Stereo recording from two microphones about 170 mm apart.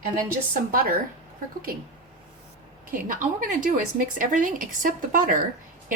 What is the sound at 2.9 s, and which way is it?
Speech, 55° right (ahead or behind).